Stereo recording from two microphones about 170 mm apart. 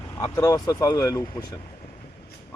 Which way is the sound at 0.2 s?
20° left (ahead or behind).